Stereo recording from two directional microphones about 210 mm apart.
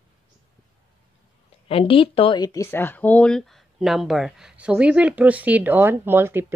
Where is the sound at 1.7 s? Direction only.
25° left (ahead or behind).